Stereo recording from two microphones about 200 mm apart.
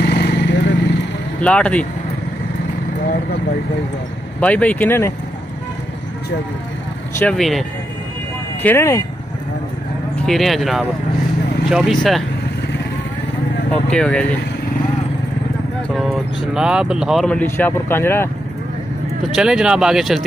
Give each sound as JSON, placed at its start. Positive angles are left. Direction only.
{"t": 0.0, "sound": "vehicle", "side_deg": 55}
{"t": 1.4, "sound": "speech", "side_deg": 5}
{"t": 4.4, "sound": "speech", "side_deg": 5}
{"t": 7.2, "sound": "speech", "side_deg": 5}
{"t": 8.6, "sound": "speech", "side_deg": 15}
{"t": 10.2, "sound": "speech", "side_deg": 0}
{"t": 13.8, "sound": "speech", "side_deg": 5}
{"t": 15.9, "sound": "vehicle", "side_deg": 0}
{"t": 16.5, "sound": "speech", "side_deg": -5}
{"t": 19.3, "sound": "speech", "side_deg": -5}